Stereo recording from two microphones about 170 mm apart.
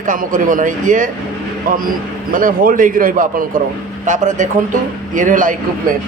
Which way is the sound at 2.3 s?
55° right (ahead or behind).